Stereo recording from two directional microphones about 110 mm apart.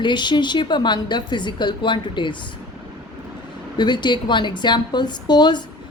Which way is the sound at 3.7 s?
45° left (ahead or behind).